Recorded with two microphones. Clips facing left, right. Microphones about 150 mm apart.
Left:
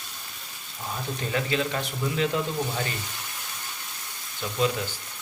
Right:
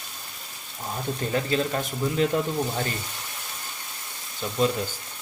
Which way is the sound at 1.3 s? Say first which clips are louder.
Right 2 dB; 35° right (ahead or behind).